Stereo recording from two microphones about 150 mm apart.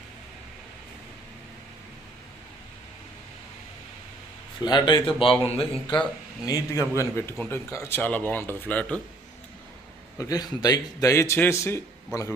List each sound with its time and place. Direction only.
4.6 s a man's voice: 30° left (ahead or behind)
6.4 s a man's voice: 25° left (ahead or behind)
10.2 s a man's voice: 25° left (ahead or behind)